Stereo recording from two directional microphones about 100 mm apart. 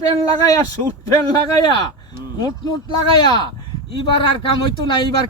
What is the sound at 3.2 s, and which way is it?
Speech, 45° left (ahead or behind).